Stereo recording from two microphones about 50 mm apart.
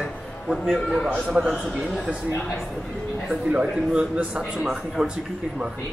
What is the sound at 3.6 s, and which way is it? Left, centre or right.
Speech, centre.